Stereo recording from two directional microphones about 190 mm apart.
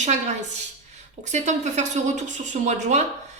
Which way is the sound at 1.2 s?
40° right (ahead or behind).